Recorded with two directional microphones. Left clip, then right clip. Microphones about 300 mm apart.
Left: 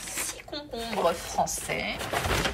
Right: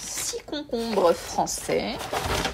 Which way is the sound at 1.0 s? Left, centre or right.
Right.